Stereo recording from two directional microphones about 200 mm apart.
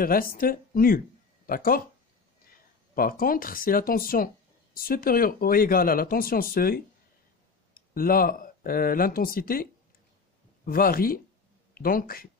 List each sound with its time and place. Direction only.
0.0 s speech: 45° left (ahead or behind)
2.9 s speech: 45° left (ahead or behind)